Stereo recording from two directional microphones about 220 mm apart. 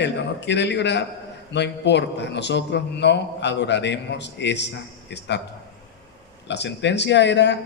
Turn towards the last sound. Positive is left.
turn(degrees=50)  # may be behind; listen again after turning